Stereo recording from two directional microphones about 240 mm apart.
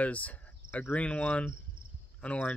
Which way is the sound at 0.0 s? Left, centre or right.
Centre.